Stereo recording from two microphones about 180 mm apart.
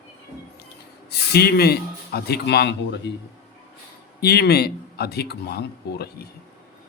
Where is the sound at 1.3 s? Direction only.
60° left (ahead or behind).